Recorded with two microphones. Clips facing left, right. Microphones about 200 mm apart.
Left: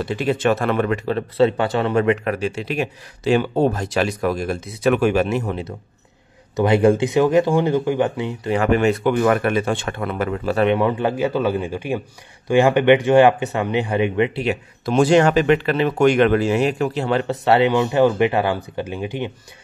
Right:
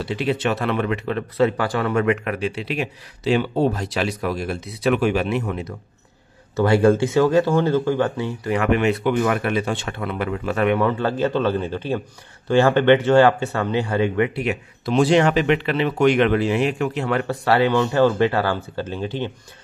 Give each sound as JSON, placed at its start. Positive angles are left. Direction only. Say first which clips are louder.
{"t": 0.0, "sound": "speech", "louder": "left 3 dB", "side_deg": 50}
{"t": 5.4, "sound": "speech", "louder": "left 1 dB", "side_deg": 30}
{"t": 8.5, "sound": "speech", "louder": "left 2 dB", "side_deg": 35}
{"t": 10.7, "sound": "speech", "louder": "left 1 dB", "side_deg": 15}
{"t": 14.9, "sound": "speech", "louder": "left 2 dB", "side_deg": 45}